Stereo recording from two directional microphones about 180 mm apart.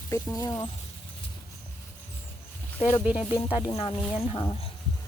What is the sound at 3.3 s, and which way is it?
Speech, 30° left (ahead or behind).